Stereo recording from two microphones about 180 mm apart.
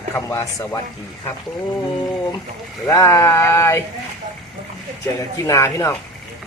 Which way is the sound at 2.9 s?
20° left (ahead or behind).